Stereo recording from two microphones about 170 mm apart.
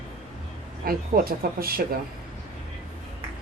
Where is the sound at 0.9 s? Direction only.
60° right (ahead or behind).